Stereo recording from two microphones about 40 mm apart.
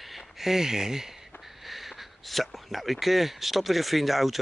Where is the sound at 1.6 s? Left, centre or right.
Centre.